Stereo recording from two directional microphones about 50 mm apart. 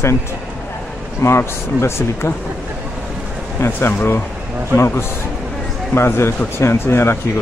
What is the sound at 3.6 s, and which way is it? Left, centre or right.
Speech, left.